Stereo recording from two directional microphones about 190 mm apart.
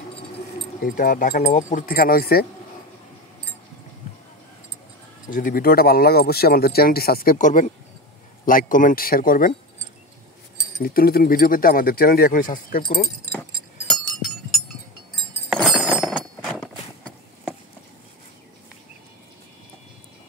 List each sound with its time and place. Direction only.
0.8 s speech: 50° left (ahead or behind)
5.3 s speech: 45° left (ahead or behind)
10.8 s speech: 50° left (ahead or behind)
15.5 s chink: centre (ahead or behind)